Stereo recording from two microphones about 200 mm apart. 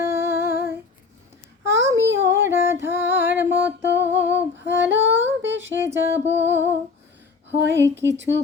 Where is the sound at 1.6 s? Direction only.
15° right (ahead or behind).